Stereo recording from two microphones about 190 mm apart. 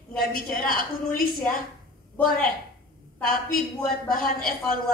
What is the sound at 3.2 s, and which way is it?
A woman's voice, 50° left (ahead or behind).